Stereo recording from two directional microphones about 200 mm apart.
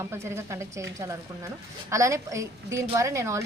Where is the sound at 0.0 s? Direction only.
15° right (ahead or behind).